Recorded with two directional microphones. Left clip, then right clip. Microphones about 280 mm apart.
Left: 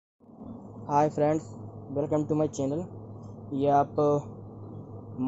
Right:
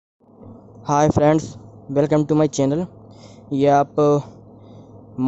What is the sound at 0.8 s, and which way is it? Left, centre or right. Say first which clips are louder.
Speech: right 8 dB; right.